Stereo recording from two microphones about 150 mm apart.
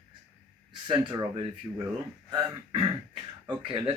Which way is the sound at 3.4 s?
35° right (ahead or behind).